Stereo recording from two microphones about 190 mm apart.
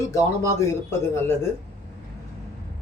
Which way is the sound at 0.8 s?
15° left (ahead or behind).